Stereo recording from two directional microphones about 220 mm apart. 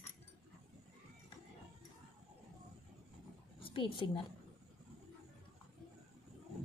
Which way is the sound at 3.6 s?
25° left (ahead or behind).